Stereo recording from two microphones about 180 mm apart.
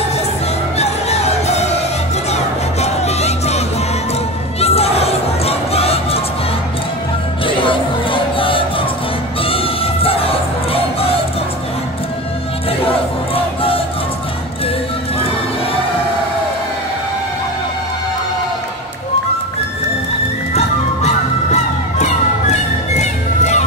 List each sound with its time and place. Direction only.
0.7 s music: 35° left (ahead or behind)
7.4 s music: 30° left (ahead or behind)
12.8 s a sound: 30° left (ahead or behind)
20.5 s music: 40° left (ahead or behind)